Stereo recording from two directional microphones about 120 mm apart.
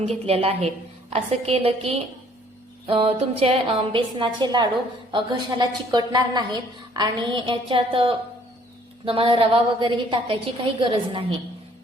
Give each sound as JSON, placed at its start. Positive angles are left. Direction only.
{"t": 0.0, "sound": "a woman's voice", "side_deg": -55}